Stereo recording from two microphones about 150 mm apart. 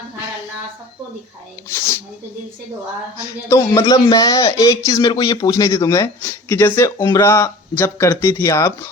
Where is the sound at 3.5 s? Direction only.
20° left (ahead or behind).